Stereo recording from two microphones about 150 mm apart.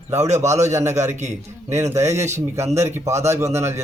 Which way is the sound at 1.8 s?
20° right (ahead or behind).